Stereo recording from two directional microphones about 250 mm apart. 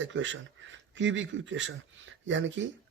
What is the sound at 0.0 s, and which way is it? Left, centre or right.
Speech, right.